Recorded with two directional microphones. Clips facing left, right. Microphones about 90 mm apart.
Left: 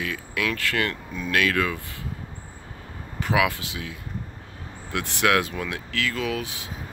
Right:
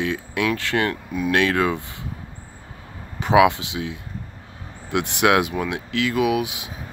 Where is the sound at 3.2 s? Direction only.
20° right (ahead or behind).